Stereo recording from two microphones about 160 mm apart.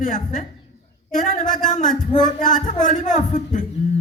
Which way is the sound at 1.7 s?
50° left (ahead or behind).